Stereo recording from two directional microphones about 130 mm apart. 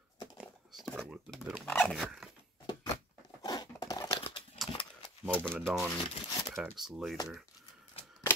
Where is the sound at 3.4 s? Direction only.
30° left (ahead or behind).